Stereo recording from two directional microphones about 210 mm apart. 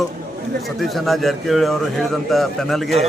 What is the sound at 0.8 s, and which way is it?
A man's voice, centre (ahead or behind).